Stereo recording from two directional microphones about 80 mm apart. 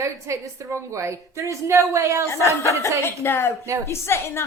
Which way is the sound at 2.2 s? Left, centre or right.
Left.